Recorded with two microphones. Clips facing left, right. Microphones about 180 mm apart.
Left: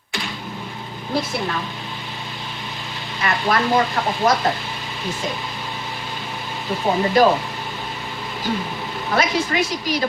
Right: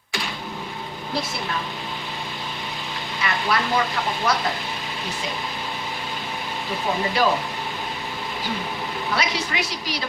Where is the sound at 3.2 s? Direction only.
45° left (ahead or behind).